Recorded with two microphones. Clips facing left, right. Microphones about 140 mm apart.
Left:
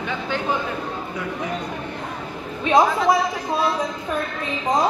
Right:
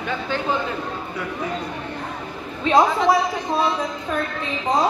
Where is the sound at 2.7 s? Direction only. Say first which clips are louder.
Even; 20° left (ahead or behind).